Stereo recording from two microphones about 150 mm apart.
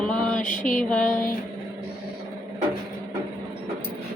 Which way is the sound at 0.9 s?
5° left (ahead or behind).